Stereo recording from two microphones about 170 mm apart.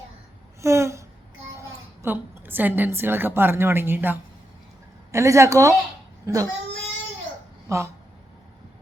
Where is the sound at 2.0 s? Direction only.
15° right (ahead or behind).